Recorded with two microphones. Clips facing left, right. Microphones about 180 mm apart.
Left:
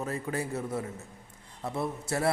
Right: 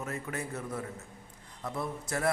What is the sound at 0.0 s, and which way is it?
A man's voice, 30° left (ahead or behind).